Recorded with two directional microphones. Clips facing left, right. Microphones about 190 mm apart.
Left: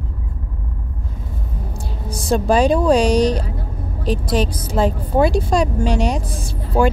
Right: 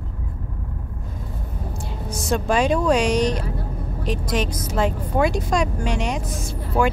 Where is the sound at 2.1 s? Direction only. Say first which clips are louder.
Left 5 dB; 35° left (ahead or behind).